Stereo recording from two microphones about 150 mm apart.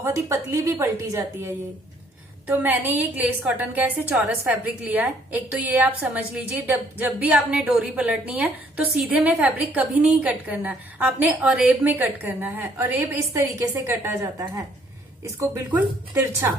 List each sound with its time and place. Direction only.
0.0 s a woman's voice: 20° right (ahead or behind)